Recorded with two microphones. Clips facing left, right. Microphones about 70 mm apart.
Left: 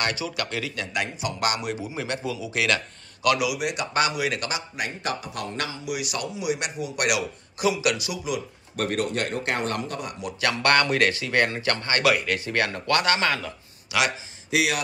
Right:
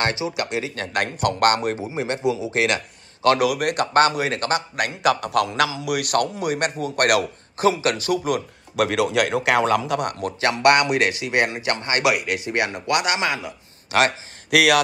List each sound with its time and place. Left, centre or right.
0.0 s a man's voice: right
1.0 s a man's voice: right
1.9 s a man's voice: right
4.7 s a man's voice: right
8.7 s a man's voice: right
10.4 s a man's voice: right
13.9 s a man's voice: right
14.5 s speech: right